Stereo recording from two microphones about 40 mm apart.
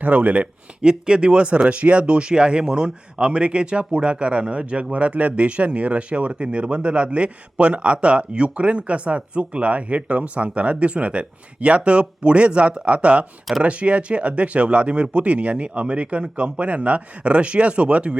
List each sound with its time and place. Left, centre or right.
0.0 s speech: right
0.8 s speech: right